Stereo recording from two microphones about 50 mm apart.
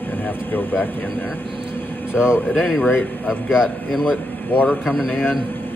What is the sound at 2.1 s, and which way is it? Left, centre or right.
Speech, left.